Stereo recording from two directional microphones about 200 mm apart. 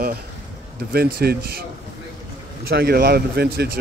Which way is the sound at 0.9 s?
50° right (ahead or behind).